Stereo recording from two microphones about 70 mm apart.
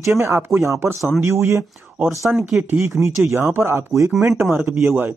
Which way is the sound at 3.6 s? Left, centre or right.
Right.